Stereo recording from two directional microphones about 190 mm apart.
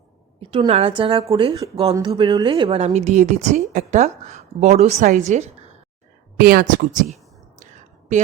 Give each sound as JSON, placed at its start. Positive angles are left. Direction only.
{"t": 0.3, "sound": "a woman's voice", "side_deg": -30}
{"t": 6.3, "sound": "speech", "side_deg": -50}
{"t": 7.6, "sound": "a sound", "side_deg": -40}